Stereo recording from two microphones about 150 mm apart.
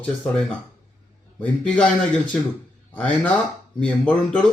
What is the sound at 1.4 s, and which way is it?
Speech, 10° left (ahead or behind).